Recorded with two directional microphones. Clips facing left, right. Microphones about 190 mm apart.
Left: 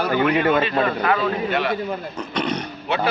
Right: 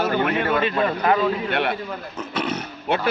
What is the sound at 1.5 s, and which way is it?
Speech, 60° right (ahead or behind).